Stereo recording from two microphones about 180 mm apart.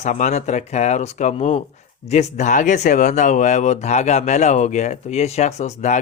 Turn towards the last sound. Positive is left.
turn(degrees=40)  # may be behind; listen again after turning